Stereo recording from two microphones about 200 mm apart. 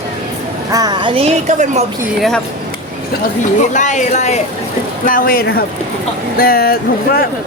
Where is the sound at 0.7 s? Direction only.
20° right (ahead or behind); by 1.8 s 35° right (ahead or behind).